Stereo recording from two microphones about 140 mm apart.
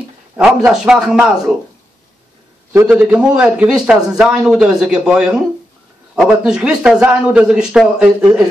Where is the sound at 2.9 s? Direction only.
5° right (ahead or behind).